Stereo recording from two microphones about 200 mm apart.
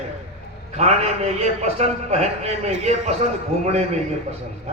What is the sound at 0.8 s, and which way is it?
A man's voice, 30° right (ahead or behind).